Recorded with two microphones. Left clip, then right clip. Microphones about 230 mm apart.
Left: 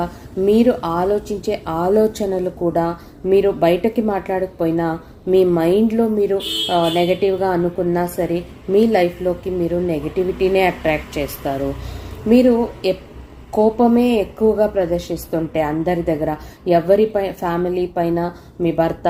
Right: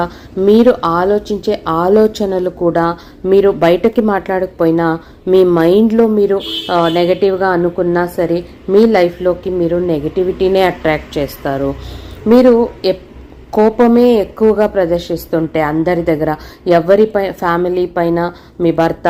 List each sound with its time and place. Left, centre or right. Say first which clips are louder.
0.0 s a woman's voice: right 5 dB; right